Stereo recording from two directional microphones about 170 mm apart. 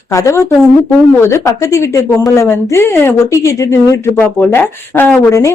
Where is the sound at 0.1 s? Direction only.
15° left (ahead or behind).